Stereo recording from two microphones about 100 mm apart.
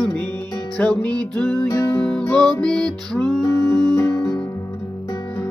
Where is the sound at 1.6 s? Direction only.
25° left (ahead or behind).